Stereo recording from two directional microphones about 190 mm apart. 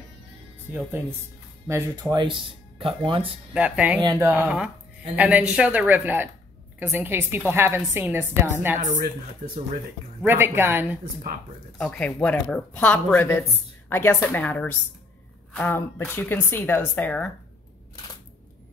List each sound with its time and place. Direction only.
1.7 s speech: 15° right (ahead or behind)
3.5 s a woman's voice: 5° right (ahead or behind)
4.0 s speech: 20° right (ahead or behind)
4.3 s a woman's voice: 5° right (ahead or behind)
8.8 s speech: 40° right (ahead or behind)
10.2 s a woman's voice: 10° right (ahead or behind)
11.8 s speech: 5° left (ahead or behind)